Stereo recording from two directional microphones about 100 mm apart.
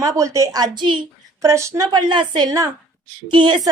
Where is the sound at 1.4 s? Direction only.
30° right (ahead or behind).